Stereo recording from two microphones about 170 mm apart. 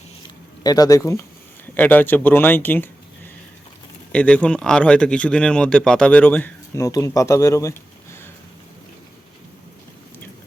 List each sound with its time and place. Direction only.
0.6 s a man's voice: 20° left (ahead or behind)
4.1 s a man's voice: 5° left (ahead or behind)